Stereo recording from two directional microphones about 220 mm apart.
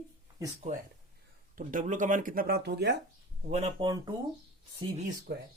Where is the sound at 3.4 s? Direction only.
30° right (ahead or behind).